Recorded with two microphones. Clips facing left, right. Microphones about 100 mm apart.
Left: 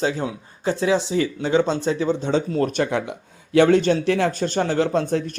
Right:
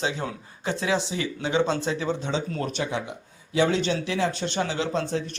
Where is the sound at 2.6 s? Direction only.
55° left (ahead or behind).